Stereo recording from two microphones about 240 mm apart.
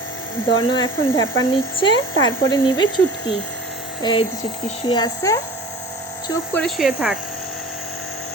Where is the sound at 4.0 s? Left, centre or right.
Centre.